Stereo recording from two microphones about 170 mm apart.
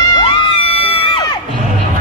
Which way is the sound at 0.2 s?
35° left (ahead or behind).